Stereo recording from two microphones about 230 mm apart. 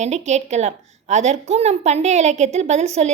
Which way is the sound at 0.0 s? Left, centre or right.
Right.